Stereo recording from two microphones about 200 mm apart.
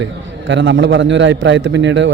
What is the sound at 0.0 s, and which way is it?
A man's voice, 65° right (ahead or behind).